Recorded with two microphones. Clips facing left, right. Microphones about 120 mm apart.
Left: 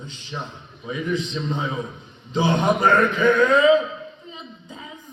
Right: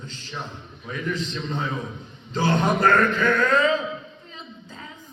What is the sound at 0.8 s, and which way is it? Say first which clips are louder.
Speech: left 3 dB; 15° left (ahead or behind).